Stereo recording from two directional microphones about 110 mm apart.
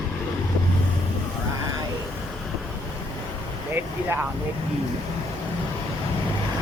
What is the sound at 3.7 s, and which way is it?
Vehicle, 20° right (ahead or behind).